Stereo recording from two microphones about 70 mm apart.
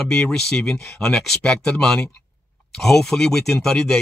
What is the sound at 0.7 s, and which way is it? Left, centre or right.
Speech, left.